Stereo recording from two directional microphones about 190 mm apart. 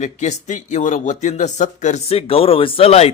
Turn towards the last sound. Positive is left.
turn(degrees=35)  # may be behind; listen again after turning